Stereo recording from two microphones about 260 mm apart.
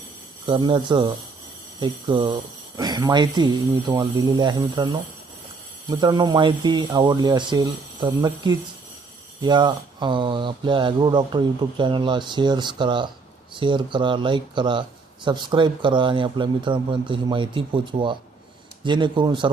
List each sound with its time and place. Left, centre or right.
0.4 s speech: centre